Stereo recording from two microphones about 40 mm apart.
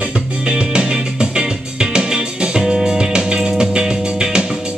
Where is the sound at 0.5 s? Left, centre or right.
Right.